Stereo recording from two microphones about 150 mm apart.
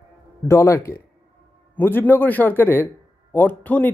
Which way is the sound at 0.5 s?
20° left (ahead or behind).